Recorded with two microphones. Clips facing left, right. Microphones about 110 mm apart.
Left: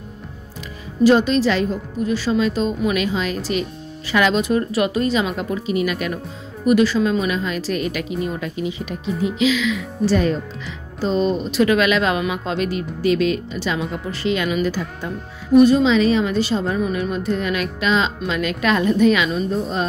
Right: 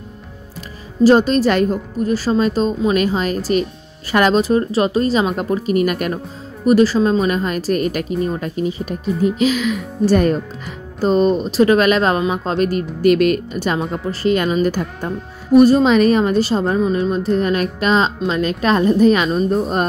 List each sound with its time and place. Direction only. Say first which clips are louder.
1.0 s a woman's voice: right 3 dB; 40° right (ahead or behind)
6.6 s a woman's voice: right 3 dB; 35° right (ahead or behind)